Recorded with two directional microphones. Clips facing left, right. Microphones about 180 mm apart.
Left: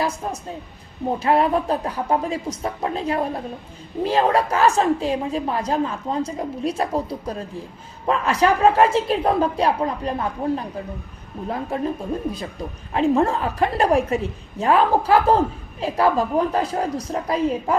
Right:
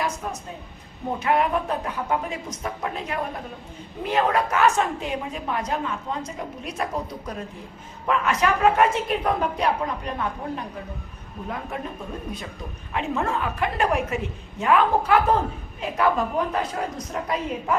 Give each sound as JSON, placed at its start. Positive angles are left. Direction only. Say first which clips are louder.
{"t": 1.2, "sound": "a woman's voice", "louder": "left 3 dB", "side_deg": 35}
{"t": 12.9, "sound": "a woman's voice", "louder": "left 7 dB", "side_deg": 35}